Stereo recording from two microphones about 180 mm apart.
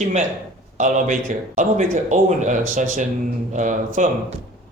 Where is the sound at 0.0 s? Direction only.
40° right (ahead or behind).